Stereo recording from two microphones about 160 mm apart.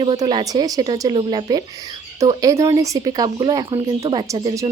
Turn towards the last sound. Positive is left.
turn(degrees=-30)  # may be behind; listen again after turning